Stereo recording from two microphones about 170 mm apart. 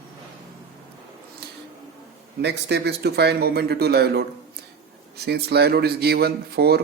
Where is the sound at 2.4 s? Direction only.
80° right.